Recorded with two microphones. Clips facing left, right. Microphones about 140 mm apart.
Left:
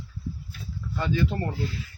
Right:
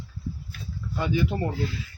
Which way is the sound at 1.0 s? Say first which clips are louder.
Right 1 dB; 15° right (ahead or behind).